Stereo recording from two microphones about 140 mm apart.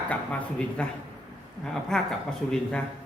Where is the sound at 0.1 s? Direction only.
10° left (ahead or behind).